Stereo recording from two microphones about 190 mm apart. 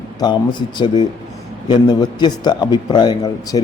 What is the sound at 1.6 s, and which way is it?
A man's voice, 20° left (ahead or behind).